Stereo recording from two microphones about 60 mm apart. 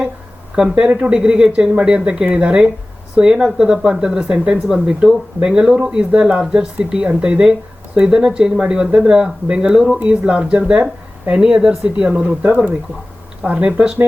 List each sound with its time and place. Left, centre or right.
0.5 s speech: centre